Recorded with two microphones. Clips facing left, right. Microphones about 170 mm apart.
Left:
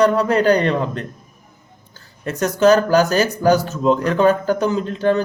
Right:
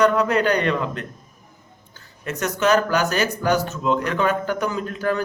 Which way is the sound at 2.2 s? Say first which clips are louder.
Left 7 dB; 35° left (ahead or behind).